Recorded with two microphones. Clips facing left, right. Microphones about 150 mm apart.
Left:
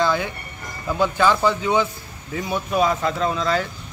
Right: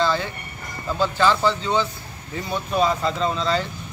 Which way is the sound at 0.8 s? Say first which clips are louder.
Left 1 dB; 15° left (ahead or behind).